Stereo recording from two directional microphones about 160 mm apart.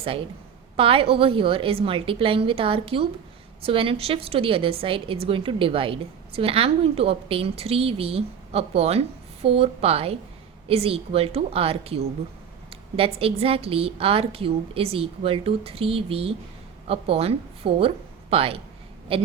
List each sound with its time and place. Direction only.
0.8 s a woman's voice: 35° right (ahead or behind)